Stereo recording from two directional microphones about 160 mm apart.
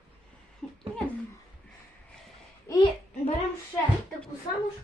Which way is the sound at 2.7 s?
20° left (ahead or behind).